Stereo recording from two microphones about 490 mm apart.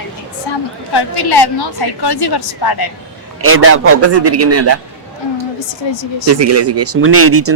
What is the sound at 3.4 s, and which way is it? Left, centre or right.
Speech, right.